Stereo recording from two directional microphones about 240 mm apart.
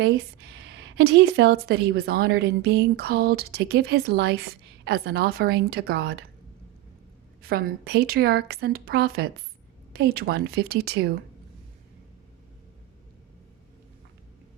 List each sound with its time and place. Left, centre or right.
0.6 s a woman's voice: right
7.4 s a woman's voice: right